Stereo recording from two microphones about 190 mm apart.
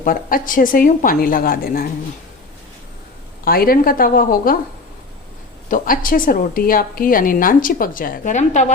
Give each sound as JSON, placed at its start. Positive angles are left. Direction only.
{"t": 0.0, "sound": "a woman's voice", "side_deg": 50}
{"t": 3.4, "sound": "a woman's voice", "side_deg": 50}
{"t": 5.7, "sound": "a woman's voice", "side_deg": 45}